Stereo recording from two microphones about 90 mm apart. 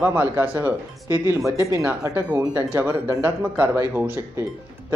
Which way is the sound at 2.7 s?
25° right (ahead or behind).